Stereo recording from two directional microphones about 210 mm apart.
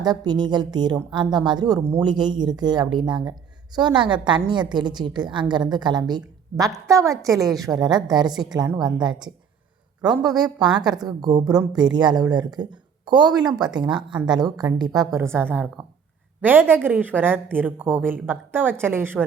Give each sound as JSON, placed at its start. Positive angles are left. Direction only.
{"t": 0.0, "sound": "a woman's voice", "side_deg": -20}
{"t": 13.5, "sound": "speech", "side_deg": -5}
{"t": 14.3, "sound": "a woman's voice", "side_deg": -20}